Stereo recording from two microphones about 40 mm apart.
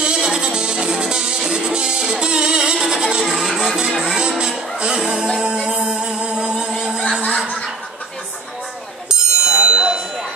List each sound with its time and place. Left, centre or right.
0.0 s music: centre
9.1 s bicycle bell: right